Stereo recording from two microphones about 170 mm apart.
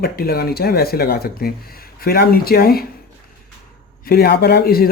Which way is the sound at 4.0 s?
65° left (ahead or behind).